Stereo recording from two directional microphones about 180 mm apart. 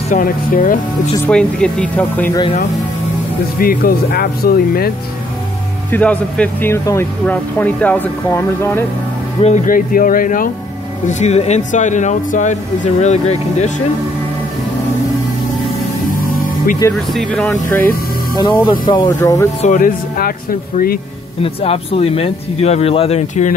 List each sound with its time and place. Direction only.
0.1 s speech: 50° left (ahead or behind)
1.2 s speech: 5° left (ahead or behind)
3.5 s speech: 55° left (ahead or behind)
5.9 s speech: 10° left (ahead or behind)
9.4 s speech: 45° left (ahead or behind)
11.1 s speech: 40° left (ahead or behind)
16.9 s speech: centre (ahead or behind)
18.3 s speech: 25° left (ahead or behind)
19.6 s speech: 45° left (ahead or behind)
21.4 s speech: 35° left (ahead or behind)